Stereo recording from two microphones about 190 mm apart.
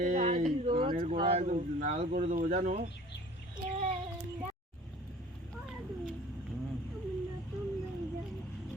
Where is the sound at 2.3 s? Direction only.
45° right (ahead or behind).